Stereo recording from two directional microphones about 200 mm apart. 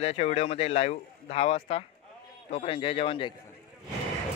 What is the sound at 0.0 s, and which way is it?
A man's voice, 30° left (ahead or behind).